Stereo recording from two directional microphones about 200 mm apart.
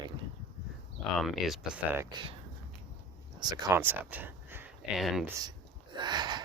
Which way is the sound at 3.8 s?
10° right (ahead or behind).